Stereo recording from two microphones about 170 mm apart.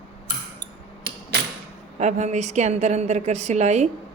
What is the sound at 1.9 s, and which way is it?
A woman's voice, 45° right (ahead or behind).